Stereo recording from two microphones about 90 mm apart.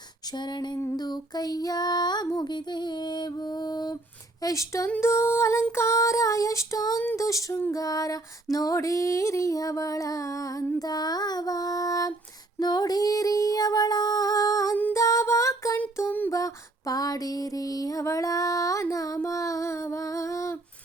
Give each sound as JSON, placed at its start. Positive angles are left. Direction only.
{"t": 0.3, "sound": "music", "side_deg": 55}
{"t": 4.4, "sound": "female singing", "side_deg": 35}
{"t": 10.8, "sound": "music", "side_deg": 45}
{"t": 14.9, "sound": "a sound", "side_deg": 35}
{"t": 16.0, "sound": "a sound", "side_deg": 20}
{"t": 16.3, "sound": "music", "side_deg": 40}